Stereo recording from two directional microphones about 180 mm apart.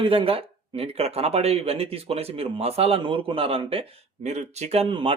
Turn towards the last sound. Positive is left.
turn(degrees=-30)  # may be behind; listen again after turning